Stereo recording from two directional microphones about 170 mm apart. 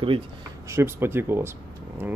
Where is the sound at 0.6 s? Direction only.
15° right (ahead or behind).